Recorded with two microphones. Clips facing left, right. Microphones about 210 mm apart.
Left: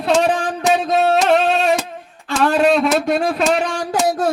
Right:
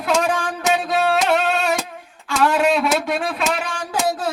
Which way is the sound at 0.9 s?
40° left (ahead or behind).